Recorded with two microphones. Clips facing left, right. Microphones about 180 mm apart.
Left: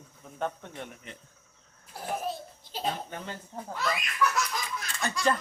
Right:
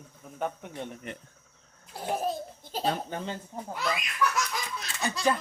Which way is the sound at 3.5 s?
10° right (ahead or behind).